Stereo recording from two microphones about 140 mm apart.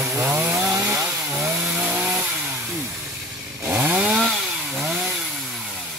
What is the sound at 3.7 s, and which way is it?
Chainsaw, 10° right (ahead or behind).